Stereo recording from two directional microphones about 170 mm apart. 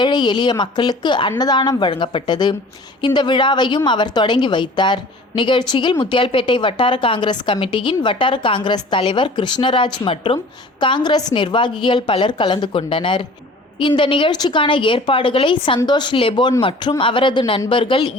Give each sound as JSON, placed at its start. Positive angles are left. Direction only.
{"t": 0.0, "sound": "a woman's voice", "side_deg": 25}